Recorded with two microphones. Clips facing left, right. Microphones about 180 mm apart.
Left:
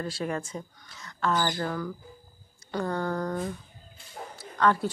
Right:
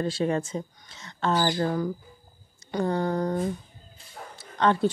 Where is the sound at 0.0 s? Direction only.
25° right (ahead or behind).